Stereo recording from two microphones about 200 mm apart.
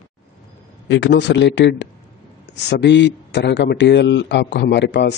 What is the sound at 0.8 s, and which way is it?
Speech, 65° left (ahead or behind).